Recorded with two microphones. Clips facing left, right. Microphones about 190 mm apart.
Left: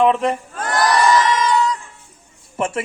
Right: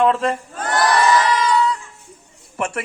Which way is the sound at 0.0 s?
20° left (ahead or behind).